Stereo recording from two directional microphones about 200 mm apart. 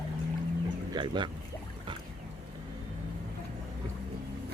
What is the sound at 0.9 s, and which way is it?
Speech, 25° right (ahead or behind).